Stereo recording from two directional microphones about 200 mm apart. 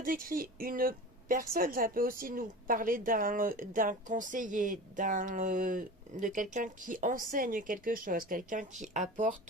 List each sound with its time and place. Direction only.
0.0 s a woman's voice: 45° right (ahead or behind)